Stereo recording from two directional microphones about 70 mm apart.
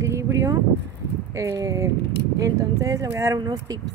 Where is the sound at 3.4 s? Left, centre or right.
Right.